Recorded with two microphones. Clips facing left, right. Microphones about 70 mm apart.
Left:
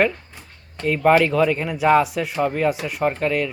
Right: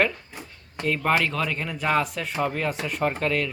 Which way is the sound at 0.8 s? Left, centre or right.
Centre.